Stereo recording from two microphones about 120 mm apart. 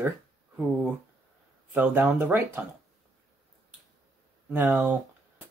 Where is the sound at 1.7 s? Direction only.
15° right (ahead or behind).